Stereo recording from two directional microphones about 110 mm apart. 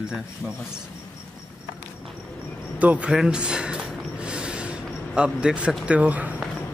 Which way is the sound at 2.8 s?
10° right (ahead or behind).